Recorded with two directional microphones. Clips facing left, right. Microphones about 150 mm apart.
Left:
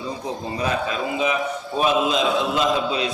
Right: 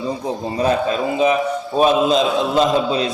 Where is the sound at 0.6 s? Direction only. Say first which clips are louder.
Right 7 dB; 35° right (ahead or behind).